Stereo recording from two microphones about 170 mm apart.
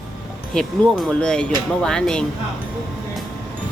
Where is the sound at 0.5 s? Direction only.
5° left (ahead or behind).